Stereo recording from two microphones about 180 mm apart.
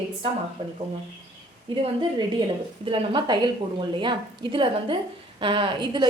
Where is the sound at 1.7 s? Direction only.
30° right (ahead or behind).